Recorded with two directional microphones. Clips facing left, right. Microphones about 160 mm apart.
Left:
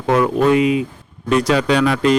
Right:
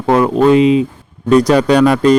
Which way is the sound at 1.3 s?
40° right (ahead or behind).